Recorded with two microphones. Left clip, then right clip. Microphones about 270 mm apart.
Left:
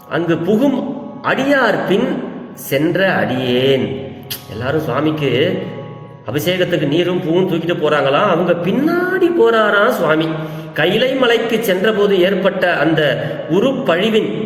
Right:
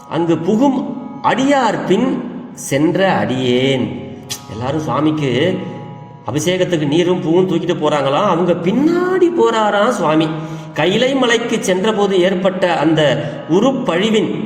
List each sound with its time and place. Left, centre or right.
0.1 s a man's voice: right